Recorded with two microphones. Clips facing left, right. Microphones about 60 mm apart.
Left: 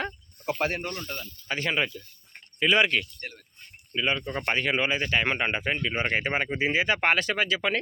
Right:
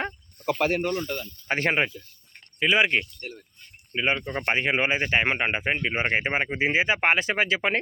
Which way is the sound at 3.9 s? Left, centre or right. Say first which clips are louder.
Right 2 dB; right.